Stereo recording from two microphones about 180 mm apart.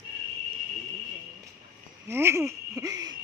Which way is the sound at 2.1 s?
15° right (ahead or behind).